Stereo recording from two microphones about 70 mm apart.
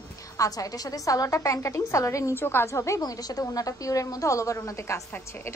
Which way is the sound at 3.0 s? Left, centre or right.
Left.